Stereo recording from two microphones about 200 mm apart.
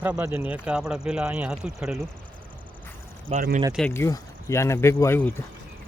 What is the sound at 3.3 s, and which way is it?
Speech, 40° right (ahead or behind).